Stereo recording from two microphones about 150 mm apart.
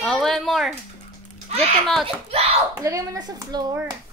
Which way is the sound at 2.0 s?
40° right (ahead or behind).